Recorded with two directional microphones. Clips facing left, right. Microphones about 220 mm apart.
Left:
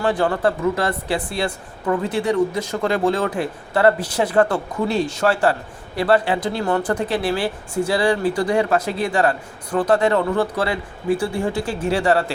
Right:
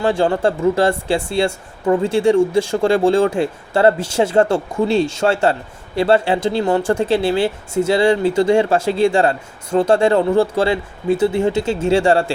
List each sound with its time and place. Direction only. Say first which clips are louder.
0.0 s speech: right 3 dB; 25° right (ahead or behind)